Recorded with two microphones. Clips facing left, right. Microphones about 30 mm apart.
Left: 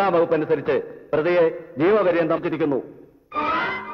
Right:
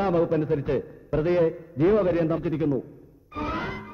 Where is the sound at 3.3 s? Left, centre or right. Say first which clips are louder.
Left 8 dB; left.